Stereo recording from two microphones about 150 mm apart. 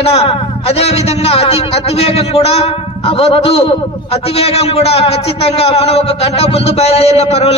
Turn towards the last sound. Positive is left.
turn(degrees=40)  # may be behind; listen again after turning